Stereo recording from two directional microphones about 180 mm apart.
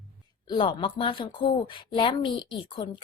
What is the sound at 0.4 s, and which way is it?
Speech, 30° left (ahead or behind).